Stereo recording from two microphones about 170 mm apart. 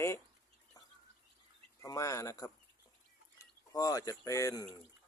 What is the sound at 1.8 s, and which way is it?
Speech, 20° left (ahead or behind).